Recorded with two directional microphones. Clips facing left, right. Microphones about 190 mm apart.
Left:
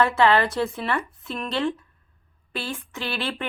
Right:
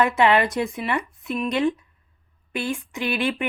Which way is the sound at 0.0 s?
15° right (ahead or behind).